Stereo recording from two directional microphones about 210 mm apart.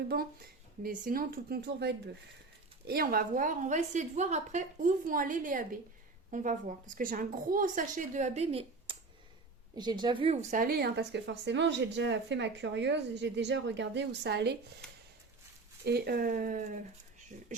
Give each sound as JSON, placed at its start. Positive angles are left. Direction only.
{"t": 0.1, "sound": "a woman's voice", "side_deg": -45}
{"t": 15.8, "sound": "a woman's voice", "side_deg": -50}